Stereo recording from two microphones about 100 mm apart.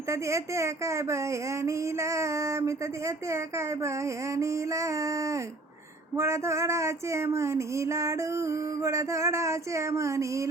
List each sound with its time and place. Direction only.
0.1 s speech: 30° right (ahead or behind)